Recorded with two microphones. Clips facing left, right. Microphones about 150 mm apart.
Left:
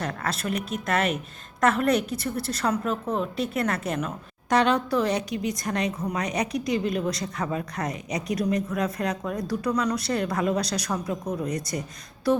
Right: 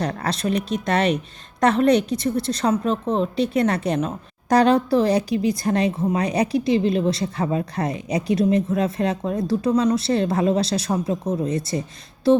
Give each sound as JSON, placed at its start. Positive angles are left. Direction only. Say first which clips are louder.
{"t": 0.0, "sound": "a woman's voice", "louder": "right 5 dB", "side_deg": -35}